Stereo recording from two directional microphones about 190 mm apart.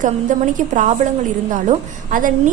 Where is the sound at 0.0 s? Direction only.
40° right (ahead or behind).